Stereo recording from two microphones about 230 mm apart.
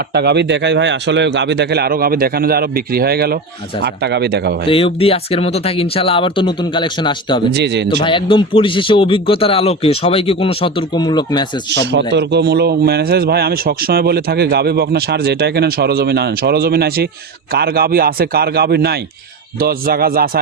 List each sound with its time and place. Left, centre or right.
0.1 s speech: right
4.9 s speech: left
7.5 s speech: right
8.0 s speech: left
12.1 s a man's voice: right